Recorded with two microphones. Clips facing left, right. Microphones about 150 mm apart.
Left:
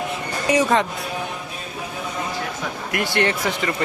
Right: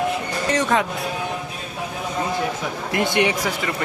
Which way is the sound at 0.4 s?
10° left (ahead or behind).